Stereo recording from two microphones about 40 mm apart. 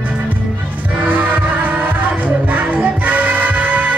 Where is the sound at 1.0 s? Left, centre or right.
Right.